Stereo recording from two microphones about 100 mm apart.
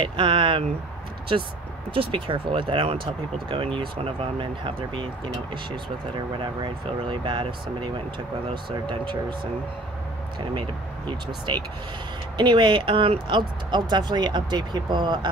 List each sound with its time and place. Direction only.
0.0 s speech: 60° right (ahead or behind)
2.0 s speech: 60° right (ahead or behind)
12.4 s speech: 50° right (ahead or behind)